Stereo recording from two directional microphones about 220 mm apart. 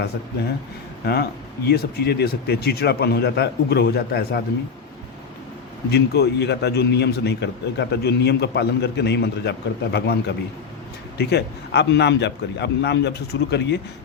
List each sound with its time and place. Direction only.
1.0 s a man's voice: 45° left (ahead or behind)
5.9 s a man's voice: 50° left (ahead or behind)